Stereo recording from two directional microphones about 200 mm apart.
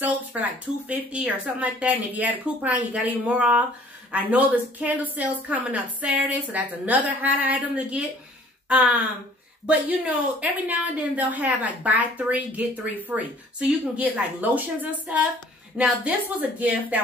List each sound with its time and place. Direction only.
0.0 s a woman's voice: 10° right (ahead or behind)
8.6 s gasp: 5° right (ahead or behind)
9.7 s a woman's voice: 5° right (ahead or behind)